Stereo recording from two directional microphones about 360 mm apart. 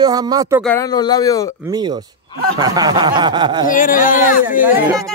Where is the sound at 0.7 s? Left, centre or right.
Centre.